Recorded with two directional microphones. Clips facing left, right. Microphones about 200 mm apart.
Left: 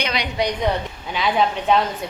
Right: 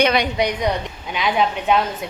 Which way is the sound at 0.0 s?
55° right (ahead or behind).